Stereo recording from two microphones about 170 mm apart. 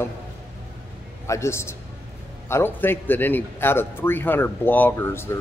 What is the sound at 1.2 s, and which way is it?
A man's voice, 15° left (ahead or behind).